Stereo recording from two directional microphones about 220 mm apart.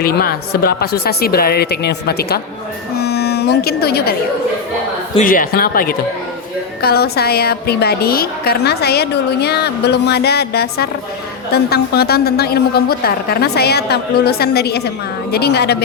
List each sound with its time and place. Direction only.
0.0 s a woman's voice: 45° left (ahead or behind)
2.9 s a sound: 45° left (ahead or behind)
5.1 s a woman's voice: 40° left (ahead or behind)